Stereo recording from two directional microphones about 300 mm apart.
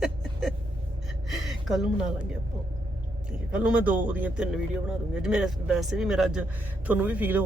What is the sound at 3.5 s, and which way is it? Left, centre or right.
Speech, centre.